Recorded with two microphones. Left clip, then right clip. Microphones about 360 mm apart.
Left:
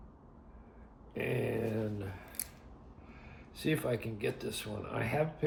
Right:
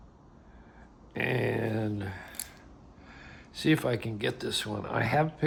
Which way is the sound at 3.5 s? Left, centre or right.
Centre.